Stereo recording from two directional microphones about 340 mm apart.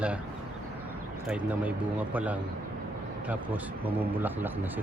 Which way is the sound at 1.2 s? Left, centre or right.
Centre.